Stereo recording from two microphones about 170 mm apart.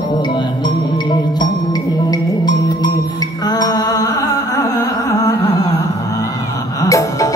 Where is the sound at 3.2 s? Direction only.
20° left (ahead or behind).